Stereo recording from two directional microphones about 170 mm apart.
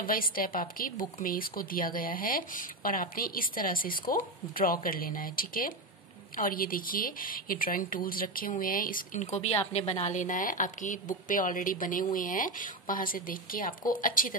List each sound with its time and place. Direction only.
0.0 s a woman's voice: 55° left (ahead or behind)